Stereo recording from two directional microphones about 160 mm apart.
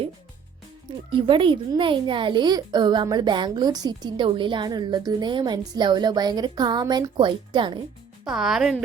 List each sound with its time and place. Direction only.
1.1 s a child's voice: 35° right (ahead or behind)
8.2 s speech: centre (ahead or behind)